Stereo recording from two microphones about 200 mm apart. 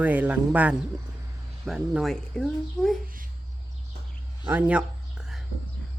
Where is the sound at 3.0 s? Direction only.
45° right (ahead or behind).